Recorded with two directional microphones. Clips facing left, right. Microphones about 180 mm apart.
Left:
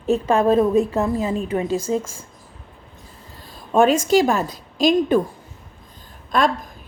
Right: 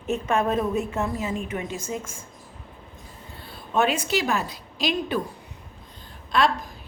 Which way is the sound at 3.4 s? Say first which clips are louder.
Left 7 dB; 45° left (ahead or behind).